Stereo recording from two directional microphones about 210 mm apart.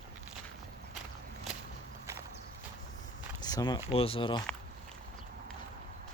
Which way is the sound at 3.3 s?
20° left (ahead or behind).